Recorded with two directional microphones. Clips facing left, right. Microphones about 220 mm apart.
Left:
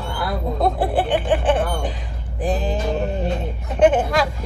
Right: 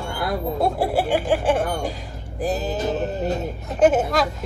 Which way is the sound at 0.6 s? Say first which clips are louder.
Left 2 dB; 10° right (ahead or behind).